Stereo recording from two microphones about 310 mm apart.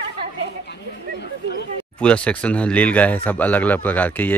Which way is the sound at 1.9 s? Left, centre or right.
Centre.